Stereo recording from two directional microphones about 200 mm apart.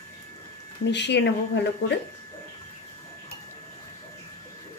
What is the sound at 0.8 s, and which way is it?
Speech, 60° left (ahead or behind).